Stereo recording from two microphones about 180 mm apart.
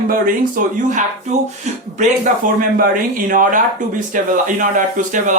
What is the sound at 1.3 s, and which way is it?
Speech, 40° right (ahead or behind).